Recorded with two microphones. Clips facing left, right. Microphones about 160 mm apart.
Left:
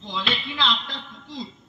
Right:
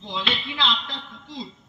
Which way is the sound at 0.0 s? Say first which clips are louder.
Even; 25° right (ahead or behind).